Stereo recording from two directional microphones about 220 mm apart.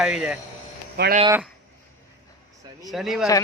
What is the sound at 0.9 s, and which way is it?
Speech, 45° right (ahead or behind).